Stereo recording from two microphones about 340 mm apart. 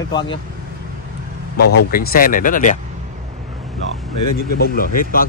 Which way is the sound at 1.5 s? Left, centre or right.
Left.